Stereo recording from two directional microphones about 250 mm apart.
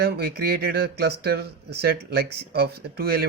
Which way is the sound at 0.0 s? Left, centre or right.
Right.